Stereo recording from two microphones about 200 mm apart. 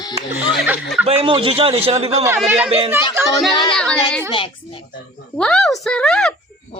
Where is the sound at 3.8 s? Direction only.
5° left (ahead or behind).